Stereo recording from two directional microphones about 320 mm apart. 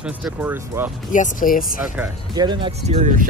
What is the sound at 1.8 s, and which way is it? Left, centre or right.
Speech, centre.